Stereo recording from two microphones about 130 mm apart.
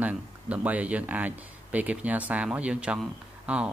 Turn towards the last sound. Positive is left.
turn(degrees=-10)  # may be behind; listen again after turning